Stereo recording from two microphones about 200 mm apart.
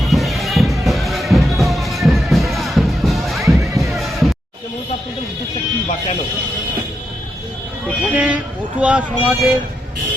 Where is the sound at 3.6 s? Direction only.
15° right (ahead or behind).